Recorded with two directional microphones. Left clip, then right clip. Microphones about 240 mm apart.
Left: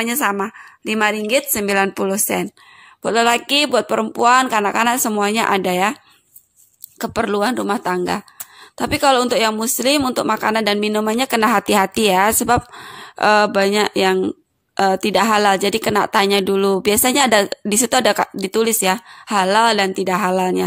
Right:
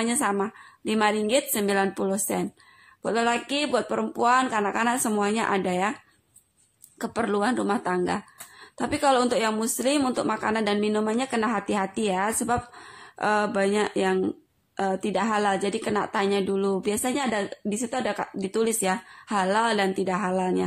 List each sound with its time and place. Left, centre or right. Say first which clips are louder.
0.0 s a woman's voice: left 6 dB; left
7.0 s a woman's voice: left 7 dB; left